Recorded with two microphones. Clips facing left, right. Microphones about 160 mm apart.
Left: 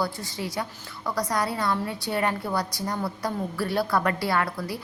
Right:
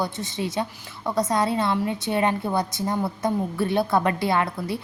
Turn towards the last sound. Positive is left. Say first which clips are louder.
# right 3 dB
turn(degrees=-20)  # may be behind; listen again after turning